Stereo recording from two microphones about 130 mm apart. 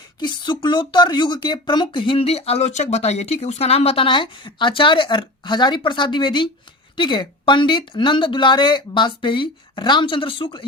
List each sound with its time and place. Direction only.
0.2 s speech: 35° left (ahead or behind)